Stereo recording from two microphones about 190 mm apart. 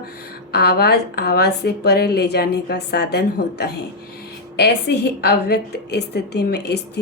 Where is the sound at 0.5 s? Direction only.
60° left (ahead or behind).